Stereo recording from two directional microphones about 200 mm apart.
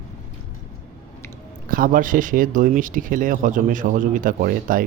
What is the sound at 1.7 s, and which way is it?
Speech, 45° right (ahead or behind).